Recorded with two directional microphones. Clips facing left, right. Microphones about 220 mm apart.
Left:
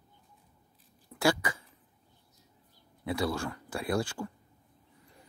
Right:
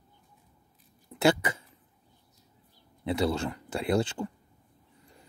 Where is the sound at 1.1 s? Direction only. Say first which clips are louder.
Right 4 dB; 25° right (ahead or behind).